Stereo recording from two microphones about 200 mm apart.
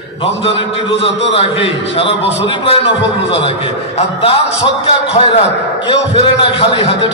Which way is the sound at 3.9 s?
35° left (ahead or behind).